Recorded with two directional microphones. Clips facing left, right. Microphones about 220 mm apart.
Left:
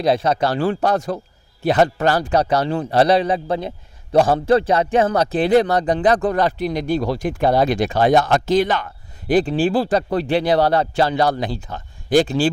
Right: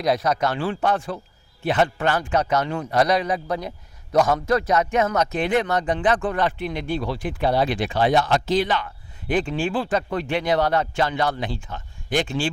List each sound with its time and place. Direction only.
0.0 s a man's voice: 30° left (ahead or behind)